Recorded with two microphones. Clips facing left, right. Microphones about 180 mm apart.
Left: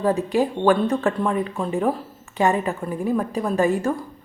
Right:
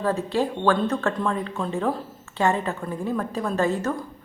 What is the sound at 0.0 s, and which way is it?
Speech, 15° left (ahead or behind).